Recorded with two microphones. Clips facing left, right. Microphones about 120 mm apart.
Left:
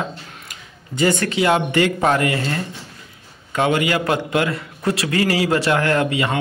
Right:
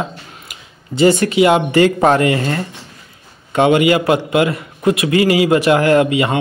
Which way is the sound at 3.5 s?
20° right (ahead or behind).